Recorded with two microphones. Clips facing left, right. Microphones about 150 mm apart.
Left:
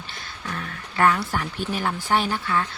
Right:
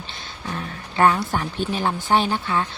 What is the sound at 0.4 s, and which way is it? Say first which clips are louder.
Speech: right 3 dB; 25° right (ahead or behind).